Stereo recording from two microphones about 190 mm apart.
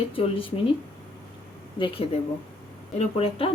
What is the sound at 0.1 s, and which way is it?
Speech, 30° left (ahead or behind).